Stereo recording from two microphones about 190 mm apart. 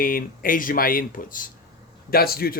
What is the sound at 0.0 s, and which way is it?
Speech, 50° left (ahead or behind).